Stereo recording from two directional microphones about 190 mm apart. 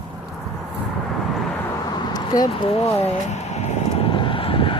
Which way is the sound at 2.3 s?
20° left (ahead or behind).